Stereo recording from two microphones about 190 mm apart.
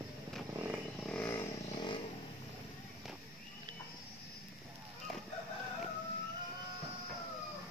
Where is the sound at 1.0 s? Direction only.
5° left (ahead or behind); by 2.0 s 25° left (ahead or behind).